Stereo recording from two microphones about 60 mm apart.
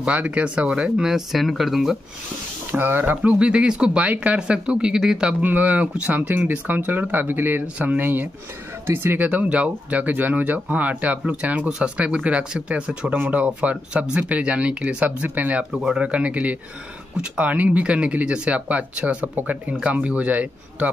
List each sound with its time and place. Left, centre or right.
0.0 s speech: right; by 2.0 s centre
2.7 s speech: right
3.3 s speech: centre
5.4 s speech: right
9.3 s speech: right
13.1 s speech: right
15.7 s speech: centre; by 20.9 s right